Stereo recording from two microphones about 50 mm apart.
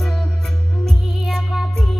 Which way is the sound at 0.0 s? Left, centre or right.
Centre.